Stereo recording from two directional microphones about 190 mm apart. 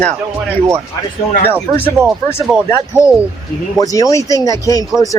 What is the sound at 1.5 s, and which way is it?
Speech, 15° right (ahead or behind).